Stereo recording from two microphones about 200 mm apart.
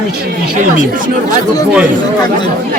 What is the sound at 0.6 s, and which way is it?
Speech, 40° right (ahead or behind).